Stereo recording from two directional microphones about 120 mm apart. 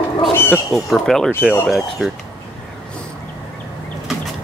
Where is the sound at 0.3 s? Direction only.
20° left (ahead or behind).